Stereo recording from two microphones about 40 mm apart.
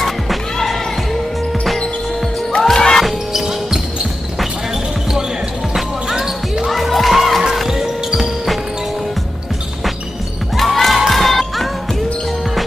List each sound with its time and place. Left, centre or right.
0.0 s music: centre
2.6 s music: centre
3.0 s music: centre
3.4 s basketball bounce: centre
6.1 s basketball bounce: centre
6.7 s music: centre
10.5 s music: centre